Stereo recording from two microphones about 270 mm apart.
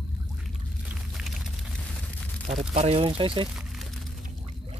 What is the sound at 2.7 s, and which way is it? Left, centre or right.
Speech, right.